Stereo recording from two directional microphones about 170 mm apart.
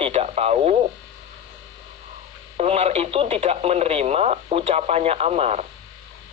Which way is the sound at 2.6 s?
35° right (ahead or behind).